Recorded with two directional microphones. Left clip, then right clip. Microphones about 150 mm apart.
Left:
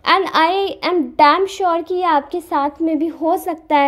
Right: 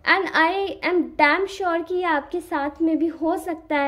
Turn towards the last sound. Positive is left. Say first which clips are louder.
# left 8 dB
turn(degrees=35)  # may be behind; listen again after turning